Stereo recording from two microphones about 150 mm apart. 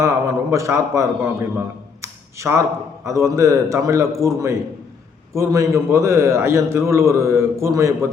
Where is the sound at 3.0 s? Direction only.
20° right (ahead or behind).